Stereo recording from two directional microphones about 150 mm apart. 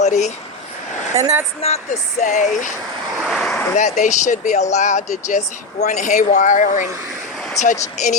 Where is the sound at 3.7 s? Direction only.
55° left (ahead or behind).